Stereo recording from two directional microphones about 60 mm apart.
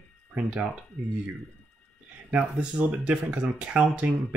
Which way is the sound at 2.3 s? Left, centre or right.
Centre.